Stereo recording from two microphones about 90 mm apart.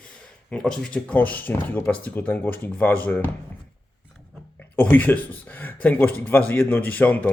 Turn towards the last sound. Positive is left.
turn(degrees=15)  # may be behind; listen again after turning